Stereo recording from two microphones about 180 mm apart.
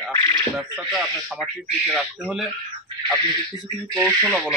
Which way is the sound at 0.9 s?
Centre (ahead or behind).